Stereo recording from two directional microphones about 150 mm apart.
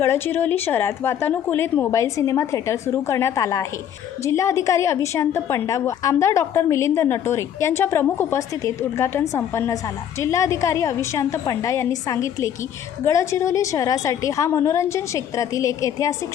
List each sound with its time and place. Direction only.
0.0 s a woman's voice: 15° left (ahead or behind)